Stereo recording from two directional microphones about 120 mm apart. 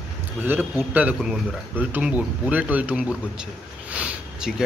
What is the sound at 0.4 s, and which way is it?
Speech, 15° right (ahead or behind).